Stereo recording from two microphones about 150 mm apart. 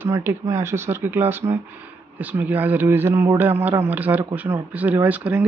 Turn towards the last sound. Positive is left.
turn(degrees=-10)  # may be behind; listen again after turning